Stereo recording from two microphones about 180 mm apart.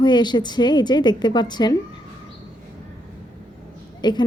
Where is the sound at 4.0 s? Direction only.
25° left (ahead or behind).